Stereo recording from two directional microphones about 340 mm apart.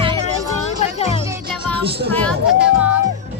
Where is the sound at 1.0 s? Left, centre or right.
Centre.